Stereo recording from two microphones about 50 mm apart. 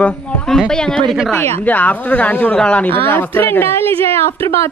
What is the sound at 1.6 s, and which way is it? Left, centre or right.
A woman's voice, left.